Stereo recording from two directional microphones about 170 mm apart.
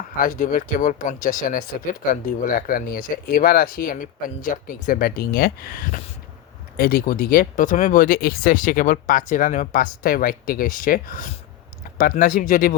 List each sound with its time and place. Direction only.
0.2 s speech: 50° left (ahead or behind)